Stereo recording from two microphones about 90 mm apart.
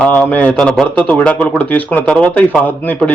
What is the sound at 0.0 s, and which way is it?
A man's voice, 15° left (ahead or behind).